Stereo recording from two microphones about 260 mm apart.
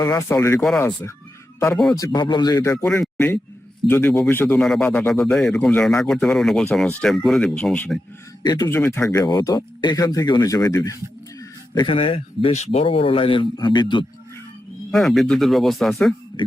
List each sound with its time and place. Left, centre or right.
0.0 s speech: centre
2.1 s speech: centre
2.7 s speech: centre
8.4 s speech: centre
14.9 s speech: centre